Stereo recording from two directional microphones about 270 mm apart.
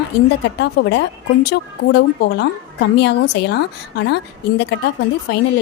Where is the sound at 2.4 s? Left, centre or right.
Left.